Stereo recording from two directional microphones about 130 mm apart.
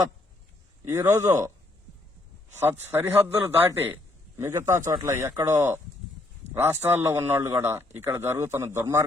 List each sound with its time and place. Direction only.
0.9 s a man's voice: 20° right (ahead or behind)
2.6 s a man's voice: 15° right (ahead or behind)